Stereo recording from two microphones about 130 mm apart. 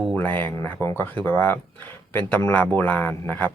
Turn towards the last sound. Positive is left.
turn(degrees=15)  # may be behind; listen again after turning